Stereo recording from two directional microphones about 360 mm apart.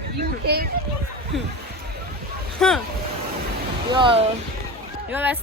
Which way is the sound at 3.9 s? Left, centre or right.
Centre.